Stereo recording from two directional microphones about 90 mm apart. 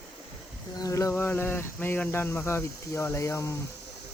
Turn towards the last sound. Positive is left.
turn(degrees=30)  # may be behind; listen again after turning